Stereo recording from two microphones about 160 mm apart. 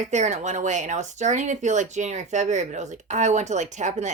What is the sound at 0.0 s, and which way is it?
Speech, 45° right (ahead or behind).